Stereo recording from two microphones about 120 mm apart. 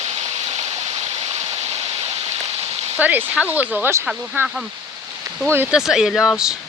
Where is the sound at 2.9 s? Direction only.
15° right (ahead or behind).